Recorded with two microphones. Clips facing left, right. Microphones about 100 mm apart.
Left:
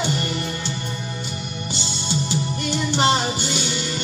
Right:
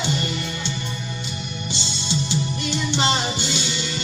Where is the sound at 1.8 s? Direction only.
45° left (ahead or behind).